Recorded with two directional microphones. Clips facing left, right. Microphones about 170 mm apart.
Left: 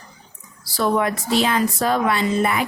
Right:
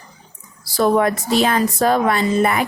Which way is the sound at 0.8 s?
45° right (ahead or behind).